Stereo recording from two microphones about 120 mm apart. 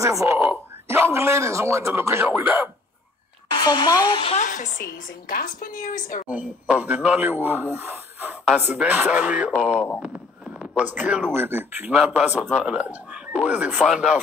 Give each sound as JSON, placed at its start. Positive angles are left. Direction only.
{"t": 0.0, "sound": "speech", "side_deg": -25}
{"t": 3.6, "sound": "speech", "side_deg": 35}
{"t": 4.4, "sound": "a woman's voice", "side_deg": 90}
{"t": 6.7, "sound": "speech", "side_deg": -10}